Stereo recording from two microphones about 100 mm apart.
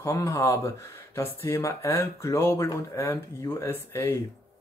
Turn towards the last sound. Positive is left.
turn(degrees=25)  # may be behind; listen again after turning